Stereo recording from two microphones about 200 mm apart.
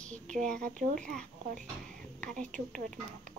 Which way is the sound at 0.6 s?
40° right (ahead or behind).